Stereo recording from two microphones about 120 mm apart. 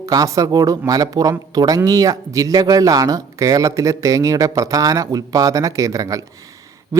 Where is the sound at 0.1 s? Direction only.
30° right (ahead or behind).